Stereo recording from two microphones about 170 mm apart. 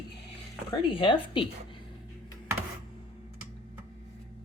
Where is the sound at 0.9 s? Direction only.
30° left (ahead or behind).